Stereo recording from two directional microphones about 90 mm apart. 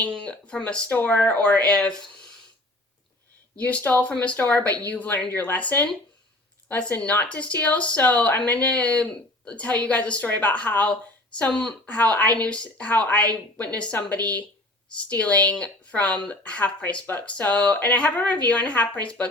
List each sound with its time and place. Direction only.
0.0 s speech: 15° left (ahead or behind)
3.5 s speech: 15° left (ahead or behind)